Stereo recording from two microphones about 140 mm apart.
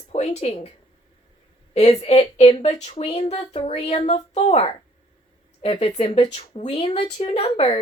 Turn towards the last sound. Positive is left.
turn(degrees=40)  # may be behind; listen again after turning